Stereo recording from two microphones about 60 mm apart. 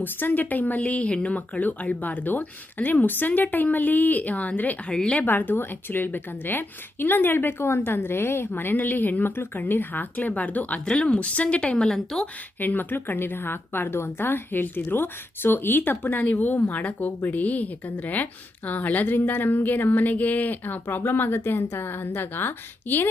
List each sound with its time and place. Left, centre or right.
0.0 s speech: left
4.9 s speech: centre
5.2 s a woman's voice: left; by 12.2 s centre
12.5 s a woman's voice: left